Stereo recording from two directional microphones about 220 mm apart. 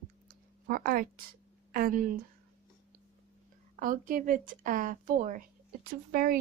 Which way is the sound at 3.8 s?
40° right (ahead or behind).